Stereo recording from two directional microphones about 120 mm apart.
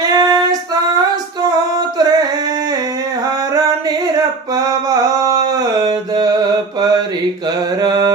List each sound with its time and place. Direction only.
0.0 s female singing: 35° right (ahead or behind)
4.5 s a sound: 30° right (ahead or behind)
7.8 s carnatic music: 35° right (ahead or behind)